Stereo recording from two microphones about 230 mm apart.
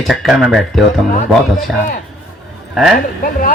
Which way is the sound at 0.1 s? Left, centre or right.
Centre.